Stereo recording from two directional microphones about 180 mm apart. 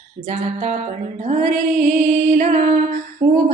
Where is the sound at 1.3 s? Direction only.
40° right (ahead or behind).